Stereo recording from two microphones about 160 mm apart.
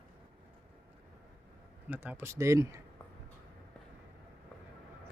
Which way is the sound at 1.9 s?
10° right (ahead or behind).